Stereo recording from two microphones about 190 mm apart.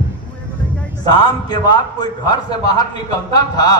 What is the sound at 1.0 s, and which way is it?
A man's voice, 20° left (ahead or behind).